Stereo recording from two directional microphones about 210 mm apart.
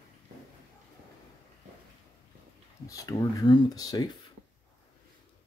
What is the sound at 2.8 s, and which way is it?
Speech, 15° left (ahead or behind).